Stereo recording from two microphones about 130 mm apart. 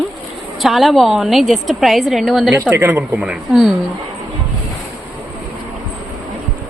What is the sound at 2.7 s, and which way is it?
Speech, 15° right (ahead or behind).